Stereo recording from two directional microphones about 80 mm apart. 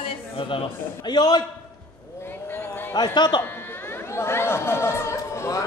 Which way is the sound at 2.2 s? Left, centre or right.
Left.